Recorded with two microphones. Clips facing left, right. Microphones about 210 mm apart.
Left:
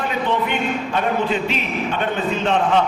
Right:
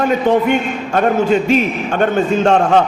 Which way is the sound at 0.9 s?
45° right (ahead or behind).